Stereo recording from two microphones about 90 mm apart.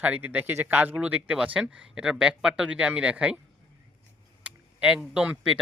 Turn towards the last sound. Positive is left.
turn(degrees=-10)  # may be behind; listen again after turning